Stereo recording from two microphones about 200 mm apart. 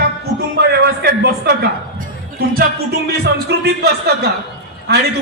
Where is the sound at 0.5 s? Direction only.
50° right (ahead or behind).